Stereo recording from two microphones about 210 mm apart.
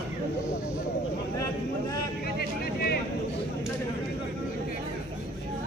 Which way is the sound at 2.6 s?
45° left (ahead or behind).